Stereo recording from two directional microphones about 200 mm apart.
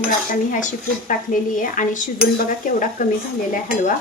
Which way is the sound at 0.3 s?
40° left (ahead or behind).